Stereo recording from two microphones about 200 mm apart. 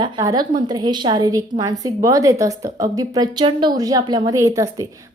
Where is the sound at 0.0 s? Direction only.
20° right (ahead or behind).